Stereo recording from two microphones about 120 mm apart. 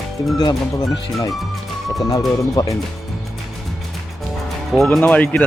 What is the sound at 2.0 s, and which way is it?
Speech, 30° left (ahead or behind).